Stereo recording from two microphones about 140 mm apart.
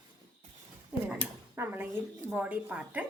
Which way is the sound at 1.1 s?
15° right (ahead or behind).